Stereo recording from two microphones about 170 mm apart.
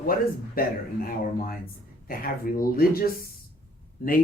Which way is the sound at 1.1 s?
60° left (ahead or behind).